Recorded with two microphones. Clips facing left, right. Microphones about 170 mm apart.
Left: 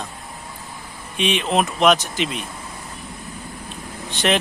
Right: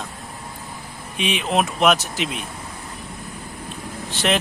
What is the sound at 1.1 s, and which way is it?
Speech, 5° right (ahead or behind).